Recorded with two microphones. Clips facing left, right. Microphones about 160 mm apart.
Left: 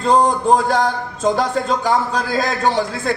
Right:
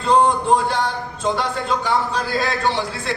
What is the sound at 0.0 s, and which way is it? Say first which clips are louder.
A man's voice: left 1 dB; 40° left (ahead or behind).